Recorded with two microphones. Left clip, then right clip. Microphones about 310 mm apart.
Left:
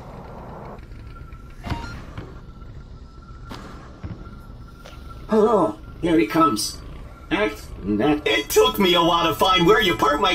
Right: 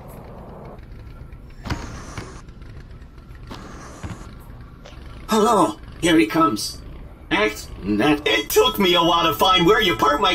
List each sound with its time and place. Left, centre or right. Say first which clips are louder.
0.4 s vehicle: left 3 dB; left
3.4 s music: even; centre
3.8 s music: right 4 dB; centre
5.3 s speech: right 1 dB; right
6.3 s speech: even; centre
7.2 s a sound: right 2 dB; centre
7.8 s speech: right 2 dB; right
8.2 s speech: even; centre